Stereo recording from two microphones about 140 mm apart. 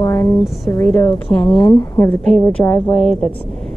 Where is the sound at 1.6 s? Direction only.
30° left (ahead or behind).